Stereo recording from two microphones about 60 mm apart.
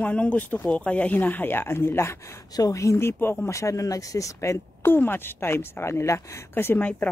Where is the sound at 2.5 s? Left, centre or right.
Left.